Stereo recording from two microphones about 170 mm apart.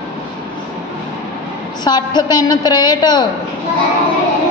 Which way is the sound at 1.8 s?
25° left (ahead or behind).